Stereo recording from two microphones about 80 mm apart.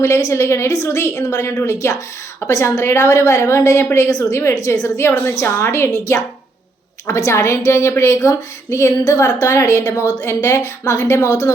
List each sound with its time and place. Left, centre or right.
0.0 s a woman's voice: left
4.1 s a woman's voice: left